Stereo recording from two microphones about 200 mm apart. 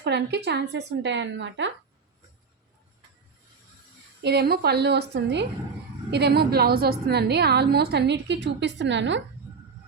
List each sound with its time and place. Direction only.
0.0 s a woman's voice: 55° right (ahead or behind)
4.2 s a woman's voice: 55° right (ahead or behind)